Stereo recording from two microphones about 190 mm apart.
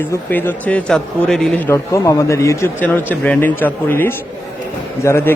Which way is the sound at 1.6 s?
15° left (ahead or behind).